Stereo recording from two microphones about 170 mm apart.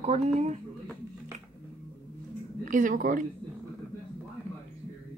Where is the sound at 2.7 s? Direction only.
50° right (ahead or behind).